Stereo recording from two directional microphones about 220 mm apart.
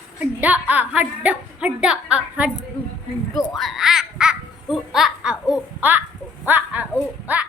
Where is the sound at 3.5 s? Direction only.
Centre (ahead or behind).